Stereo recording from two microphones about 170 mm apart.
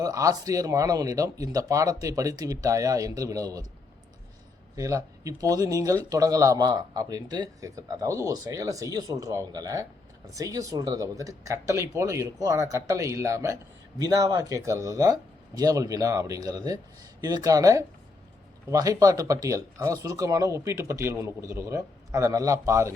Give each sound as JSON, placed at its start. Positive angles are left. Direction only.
{"t": 0.0, "sound": "speech", "side_deg": -20}
{"t": 4.8, "sound": "speech", "side_deg": -20}